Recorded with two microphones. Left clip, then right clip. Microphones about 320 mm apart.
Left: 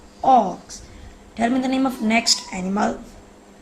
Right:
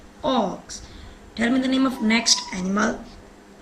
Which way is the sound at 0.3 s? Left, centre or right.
Centre.